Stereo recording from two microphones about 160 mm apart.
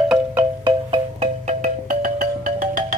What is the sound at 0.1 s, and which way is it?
Music, 10° right (ahead or behind).